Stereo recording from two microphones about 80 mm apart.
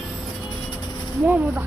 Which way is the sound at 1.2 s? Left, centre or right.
Right.